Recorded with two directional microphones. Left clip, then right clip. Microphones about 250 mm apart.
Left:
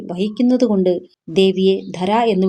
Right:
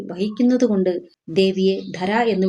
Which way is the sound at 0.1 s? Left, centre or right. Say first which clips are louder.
Left 2 dB; left.